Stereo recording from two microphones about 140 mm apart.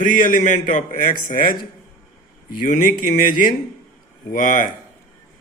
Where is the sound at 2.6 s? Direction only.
65° left (ahead or behind).